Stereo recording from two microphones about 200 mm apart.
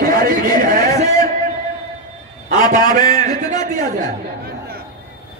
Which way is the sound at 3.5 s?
40° right (ahead or behind).